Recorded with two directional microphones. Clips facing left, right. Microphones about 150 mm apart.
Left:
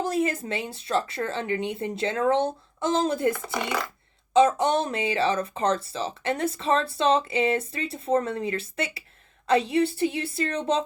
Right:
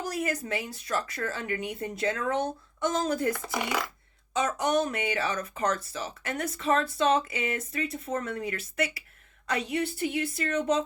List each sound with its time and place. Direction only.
0.0 s speech: 25° left (ahead or behind)
3.3 s speech: centre (ahead or behind)
4.4 s speech: 25° left (ahead or behind)